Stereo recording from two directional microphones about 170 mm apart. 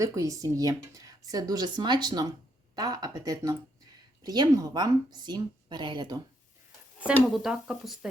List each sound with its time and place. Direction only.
0.0 s speech: 20° right (ahead or behind)
7.0 s speech: 5° right (ahead or behind)